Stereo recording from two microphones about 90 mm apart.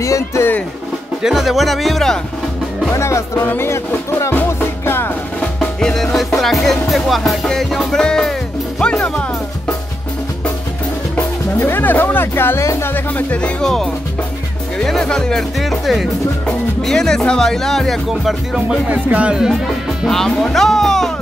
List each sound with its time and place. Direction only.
0.0 s speech: 35° left (ahead or behind)
1.2 s speech: centre (ahead or behind)
2.9 s speech: 35° left (ahead or behind)
4.2 s music: 25° left (ahead or behind)
5.8 s music: 5° left (ahead or behind)
11.6 s speech: 20° left (ahead or behind); by 18.8 s 5° right (ahead or behind)
18.9 s speech: 15° right (ahead or behind); by 21.1 s 5° left (ahead or behind)